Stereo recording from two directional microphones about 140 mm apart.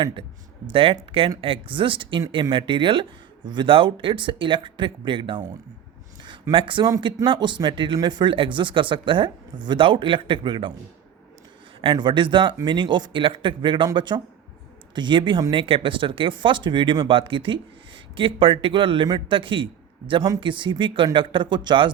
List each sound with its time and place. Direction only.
0.7 s speech: 40° right (ahead or behind)
6.5 s speech: 35° right (ahead or behind)
6.9 s speech: 25° right (ahead or behind)
11.8 s speech: 35° right (ahead or behind)
20.2 s speech: 25° right (ahead or behind)
20.5 s speech: 35° right (ahead or behind)